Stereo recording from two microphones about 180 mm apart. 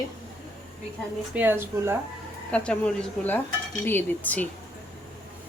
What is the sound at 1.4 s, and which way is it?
Speech, 10° right (ahead or behind).